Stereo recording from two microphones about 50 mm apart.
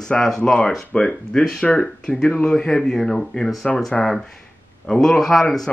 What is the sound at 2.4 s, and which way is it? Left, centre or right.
Speech, centre.